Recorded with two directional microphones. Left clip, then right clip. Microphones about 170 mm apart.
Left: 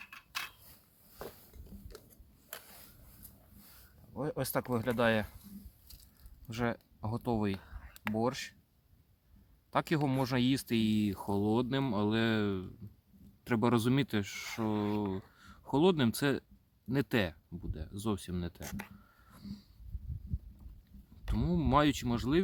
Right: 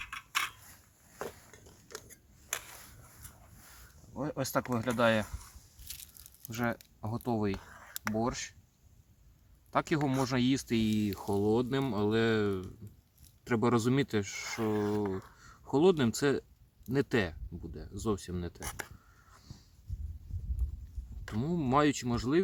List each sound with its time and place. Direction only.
4.1 s speech: 45° left (ahead or behind)
6.5 s speech: 45° left (ahead or behind)
7.5 s a sound: 5° right (ahead or behind)
8.2 s speech: 45° left (ahead or behind)
9.7 s speech: 45° left (ahead or behind)
21.3 s speech: 40° left (ahead or behind)